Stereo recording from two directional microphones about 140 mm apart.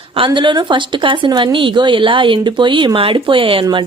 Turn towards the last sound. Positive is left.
turn(degrees=-35)  # may be behind; listen again after turning